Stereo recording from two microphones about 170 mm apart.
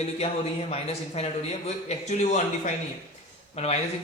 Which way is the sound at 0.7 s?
35° left (ahead or behind).